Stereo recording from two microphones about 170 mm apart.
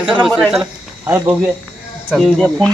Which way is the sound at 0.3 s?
5° left (ahead or behind).